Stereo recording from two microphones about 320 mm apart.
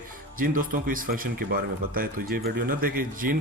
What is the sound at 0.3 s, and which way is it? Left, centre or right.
Speech, right.